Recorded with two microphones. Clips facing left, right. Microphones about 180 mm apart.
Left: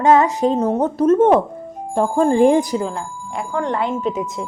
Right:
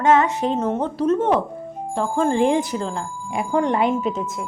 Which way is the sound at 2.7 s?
10° left (ahead or behind).